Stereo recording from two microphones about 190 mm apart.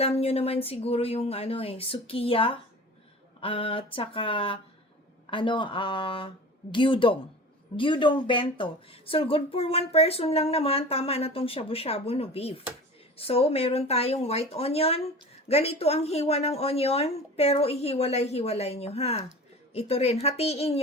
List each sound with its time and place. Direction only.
0.0 s speech: 30° left (ahead or behind)